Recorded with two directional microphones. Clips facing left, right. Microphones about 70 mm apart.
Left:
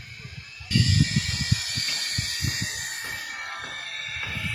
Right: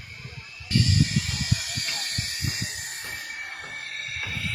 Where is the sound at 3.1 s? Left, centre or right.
Left.